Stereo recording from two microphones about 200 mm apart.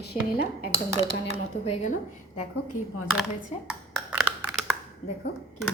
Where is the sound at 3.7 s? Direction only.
5° right (ahead or behind).